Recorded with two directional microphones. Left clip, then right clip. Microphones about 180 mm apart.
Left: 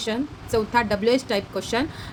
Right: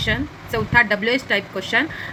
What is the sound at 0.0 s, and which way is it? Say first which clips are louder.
A woman's voice: right 5 dB; 50° left (ahead or behind).